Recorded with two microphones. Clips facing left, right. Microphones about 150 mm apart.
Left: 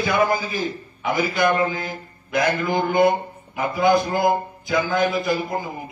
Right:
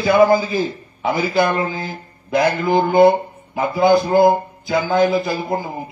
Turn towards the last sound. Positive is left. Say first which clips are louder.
# right 2 dB
turn(degrees=-30)  # may be behind; listen again after turning